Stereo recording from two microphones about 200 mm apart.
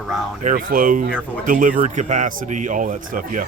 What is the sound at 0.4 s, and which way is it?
Speech, 45° right (ahead or behind).